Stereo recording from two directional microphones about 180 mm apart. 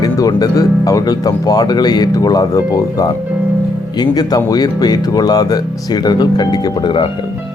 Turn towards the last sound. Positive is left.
turn(degrees=25)  # may be behind; listen again after turning